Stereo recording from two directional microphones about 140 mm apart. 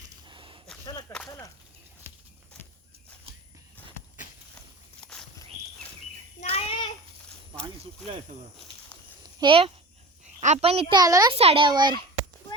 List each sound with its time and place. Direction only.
0.3 s a sound: 35° right (ahead or behind)
1.1 s chop: 20° left (ahead or behind)
4.9 s walk: 5° left (ahead or behind)
6.4 s child singing: 45° left (ahead or behind)
9.4 s speech: 40° right (ahead or behind)
10.4 s a child's voice: 50° right (ahead or behind)
10.9 s speech: 25° right (ahead or behind)
11.3 s speech: 40° right (ahead or behind)